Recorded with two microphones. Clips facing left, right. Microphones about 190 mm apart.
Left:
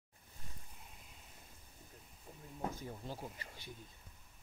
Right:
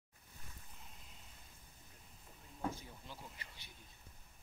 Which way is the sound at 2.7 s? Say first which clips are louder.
Left 6 dB; 45° left (ahead or behind).